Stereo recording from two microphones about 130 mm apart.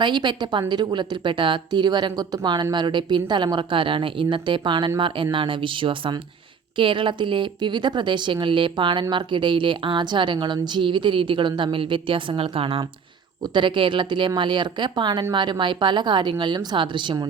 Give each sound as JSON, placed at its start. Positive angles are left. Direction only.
{"t": 0.0, "sound": "speech", "side_deg": -35}